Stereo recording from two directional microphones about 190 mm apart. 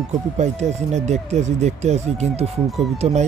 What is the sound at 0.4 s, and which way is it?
Speech, 35° right (ahead or behind).